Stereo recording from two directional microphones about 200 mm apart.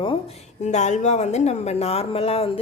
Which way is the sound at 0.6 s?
35° left (ahead or behind).